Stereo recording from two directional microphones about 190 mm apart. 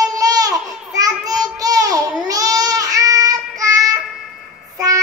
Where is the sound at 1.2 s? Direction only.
20° right (ahead or behind).